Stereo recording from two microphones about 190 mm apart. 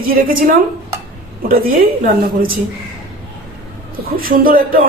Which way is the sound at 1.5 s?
50° right (ahead or behind).